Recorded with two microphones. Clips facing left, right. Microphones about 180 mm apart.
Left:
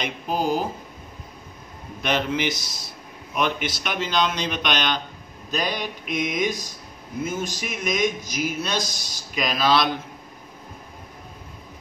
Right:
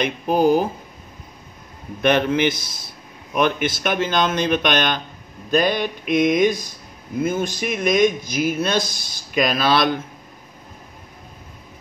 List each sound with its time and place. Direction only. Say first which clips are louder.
0.0 s speech: right 8 dB; 55° right (ahead or behind)
2.0 s speech: right 7 dB; 55° right (ahead or behind)